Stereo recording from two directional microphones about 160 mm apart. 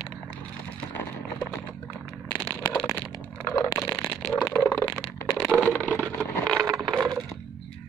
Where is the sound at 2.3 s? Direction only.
10° left (ahead or behind).